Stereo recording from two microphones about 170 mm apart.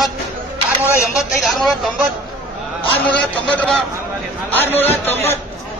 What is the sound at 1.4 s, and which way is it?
Speech, centre (ahead or behind).